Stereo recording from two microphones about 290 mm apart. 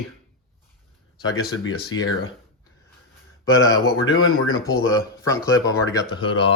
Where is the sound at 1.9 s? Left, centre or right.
Left.